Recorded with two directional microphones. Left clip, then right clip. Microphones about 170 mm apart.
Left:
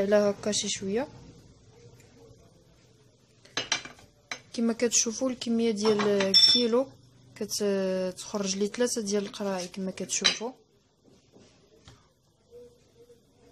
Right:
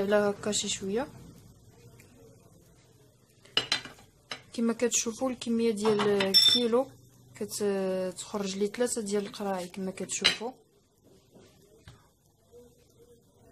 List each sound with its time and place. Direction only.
0.0 s speech: 10° left (ahead or behind)
4.5 s speech: 10° left (ahead or behind)